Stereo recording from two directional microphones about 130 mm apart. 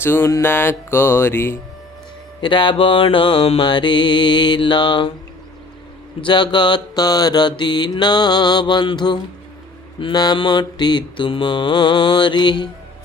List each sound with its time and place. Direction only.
0.0 s music: 20° left (ahead or behind)
2.4 s mantra: 40° left (ahead or behind)
6.2 s mantra: 35° left (ahead or behind)